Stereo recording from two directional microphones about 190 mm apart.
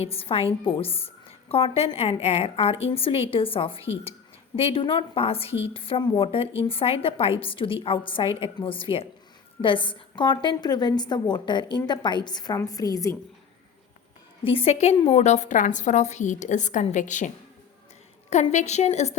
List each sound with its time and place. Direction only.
0.0 s a woman's voice: 30° left (ahead or behind)
14.4 s a woman's voice: 30° left (ahead or behind)